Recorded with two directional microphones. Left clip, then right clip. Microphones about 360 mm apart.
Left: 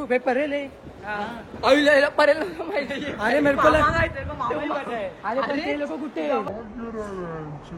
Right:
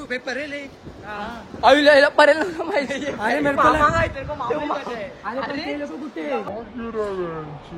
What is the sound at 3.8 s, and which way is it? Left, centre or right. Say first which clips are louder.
A man's voice: right 3 dB; centre.